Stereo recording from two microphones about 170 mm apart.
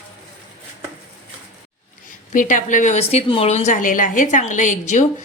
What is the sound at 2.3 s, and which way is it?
A woman's voice, 50° left (ahead or behind).